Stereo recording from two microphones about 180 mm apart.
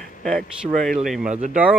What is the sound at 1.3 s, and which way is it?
Speech, 40° right (ahead or behind).